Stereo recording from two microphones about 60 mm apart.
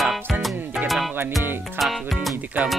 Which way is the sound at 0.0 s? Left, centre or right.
Centre.